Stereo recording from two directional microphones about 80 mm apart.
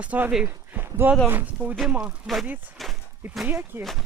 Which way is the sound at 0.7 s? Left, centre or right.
Right.